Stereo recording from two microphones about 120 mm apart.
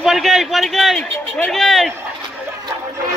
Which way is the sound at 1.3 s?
5° left (ahead or behind).